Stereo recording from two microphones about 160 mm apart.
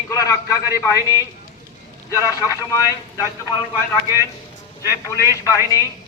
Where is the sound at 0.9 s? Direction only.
20° right (ahead or behind).